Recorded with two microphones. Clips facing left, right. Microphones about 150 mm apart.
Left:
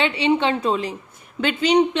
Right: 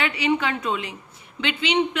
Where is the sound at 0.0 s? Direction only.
25° left (ahead or behind).